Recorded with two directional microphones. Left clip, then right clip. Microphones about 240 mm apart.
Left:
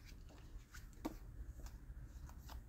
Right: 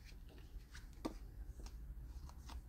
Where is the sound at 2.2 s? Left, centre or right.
Centre.